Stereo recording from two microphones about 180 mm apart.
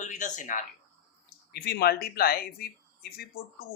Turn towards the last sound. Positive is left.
turn(degrees=60)  # may be behind; listen again after turning